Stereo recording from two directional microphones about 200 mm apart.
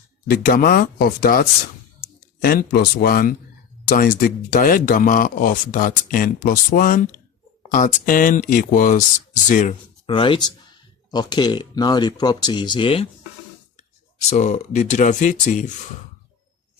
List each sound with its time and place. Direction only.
0.3 s speech: 45° left (ahead or behind)
10.1 s speech: 25° left (ahead or behind)
14.2 s speech: 35° left (ahead or behind)